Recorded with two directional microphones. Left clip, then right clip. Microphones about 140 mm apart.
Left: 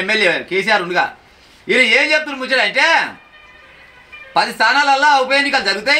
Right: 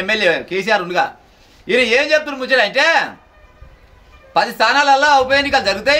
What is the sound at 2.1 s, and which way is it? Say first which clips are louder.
Speech: right 1 dB; 45° right (ahead or behind).